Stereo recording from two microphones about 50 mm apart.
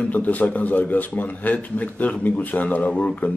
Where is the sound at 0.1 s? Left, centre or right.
Left.